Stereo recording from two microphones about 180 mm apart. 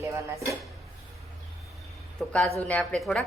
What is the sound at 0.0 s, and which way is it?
Speech, 15° right (ahead or behind).